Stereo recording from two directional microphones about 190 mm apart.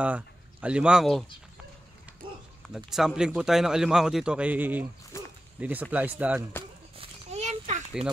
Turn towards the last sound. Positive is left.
turn(degrees=-40)  # may be behind; listen again after turning